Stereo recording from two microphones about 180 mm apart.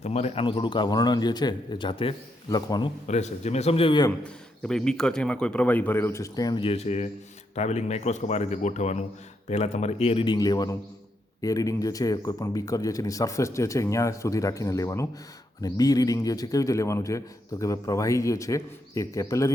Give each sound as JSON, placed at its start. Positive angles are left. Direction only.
{"t": 0.0, "sound": "speech", "side_deg": 35}
{"t": 3.1, "sound": "speech", "side_deg": 40}
{"t": 4.2, "sound": "a man's voice", "side_deg": 5}